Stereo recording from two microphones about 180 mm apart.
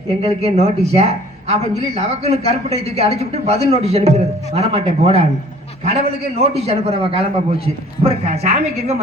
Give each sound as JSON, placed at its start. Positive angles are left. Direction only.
{"t": 0.2, "sound": "speech", "side_deg": -35}